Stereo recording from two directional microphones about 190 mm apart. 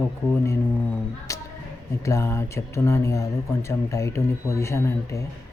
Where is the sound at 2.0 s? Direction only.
15° left (ahead or behind).